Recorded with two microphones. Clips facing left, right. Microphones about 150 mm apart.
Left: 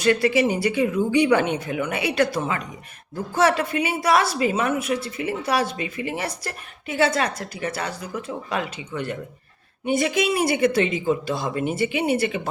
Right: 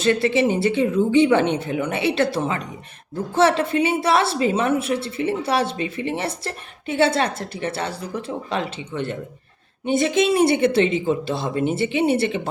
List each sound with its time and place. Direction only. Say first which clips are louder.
0.0 s speech: right 1 dB; 25° right (ahead or behind)